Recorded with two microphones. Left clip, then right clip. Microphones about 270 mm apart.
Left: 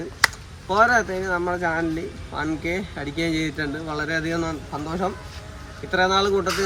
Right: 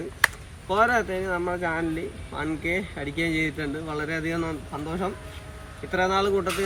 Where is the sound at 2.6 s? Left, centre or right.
Left.